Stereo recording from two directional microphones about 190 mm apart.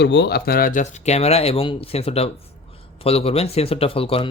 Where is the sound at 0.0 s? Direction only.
65° left (ahead or behind).